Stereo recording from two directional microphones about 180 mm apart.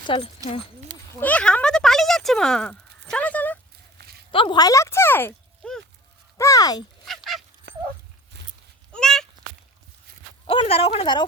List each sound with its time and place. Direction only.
0.1 s speech: 30° left (ahead or behind)
1.1 s speech: 10° left (ahead or behind)
3.1 s a sound: 10° left (ahead or behind)
4.3 s speech: 30° left (ahead or behind); by 5.8 s 5° left (ahead or behind)
6.3 s speech: 20° left (ahead or behind)
7.0 s dog: centre (ahead or behind)
8.9 s a sound: 5° left (ahead or behind)
10.5 s speech: 30° left (ahead or behind)